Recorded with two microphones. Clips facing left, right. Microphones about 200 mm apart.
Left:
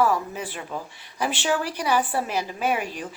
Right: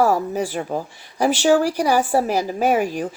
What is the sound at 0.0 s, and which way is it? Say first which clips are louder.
A woman's voice: right 5 dB; 40° right (ahead or behind).